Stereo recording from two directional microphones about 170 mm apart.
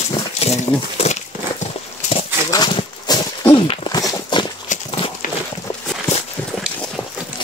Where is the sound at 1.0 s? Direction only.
40° left (ahead or behind).